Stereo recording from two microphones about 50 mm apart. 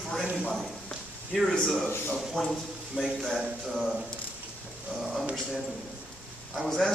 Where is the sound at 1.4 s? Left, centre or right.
Centre.